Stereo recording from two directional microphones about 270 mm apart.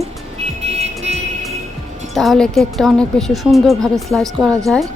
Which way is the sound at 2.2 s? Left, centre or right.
Centre.